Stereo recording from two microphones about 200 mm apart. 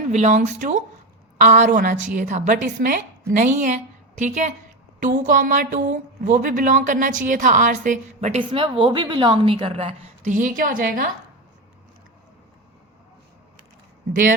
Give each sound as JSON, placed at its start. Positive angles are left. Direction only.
{"t": 0.1, "sound": "speech", "side_deg": -35}